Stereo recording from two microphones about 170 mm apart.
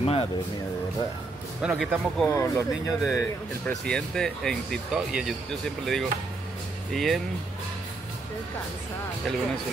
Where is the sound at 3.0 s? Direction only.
Centre (ahead or behind).